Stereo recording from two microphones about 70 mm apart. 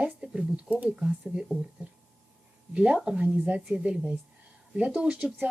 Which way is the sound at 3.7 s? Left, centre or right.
Centre.